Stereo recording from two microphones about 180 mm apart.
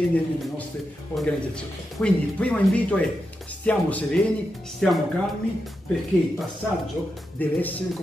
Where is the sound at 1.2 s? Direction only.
5° left (ahead or behind).